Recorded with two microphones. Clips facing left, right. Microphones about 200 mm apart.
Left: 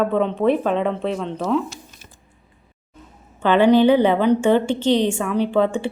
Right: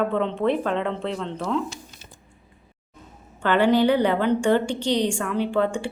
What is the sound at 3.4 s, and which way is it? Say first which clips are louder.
A woman's voice: left 5 dB; 20° left (ahead or behind).